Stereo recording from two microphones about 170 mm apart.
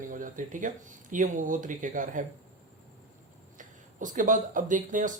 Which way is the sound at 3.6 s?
50° right (ahead or behind).